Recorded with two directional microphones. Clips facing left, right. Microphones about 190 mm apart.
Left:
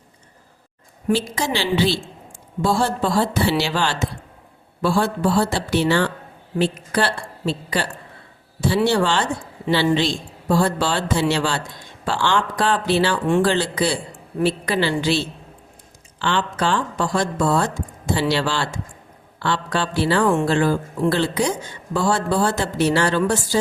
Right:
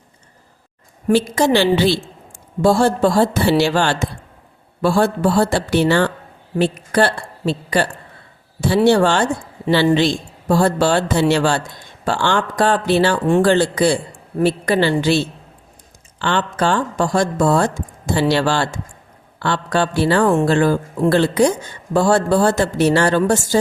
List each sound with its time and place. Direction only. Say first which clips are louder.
1.1 s a woman's voice: right 7 dB; 55° right (ahead or behind)
2.6 s speech: right 6 dB; 45° right (ahead or behind)